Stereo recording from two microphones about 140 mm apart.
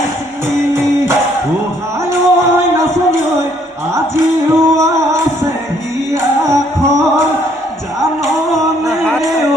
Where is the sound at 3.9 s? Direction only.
20° right (ahead or behind).